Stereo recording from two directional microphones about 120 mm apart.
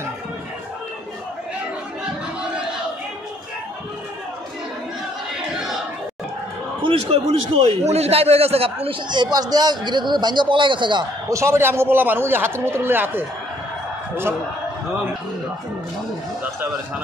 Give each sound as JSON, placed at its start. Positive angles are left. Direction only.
{"t": 6.8, "sound": "a man's voice", "side_deg": -50}
{"t": 8.8, "sound": "speech", "side_deg": -40}
{"t": 11.2, "sound": "a man's voice", "side_deg": -25}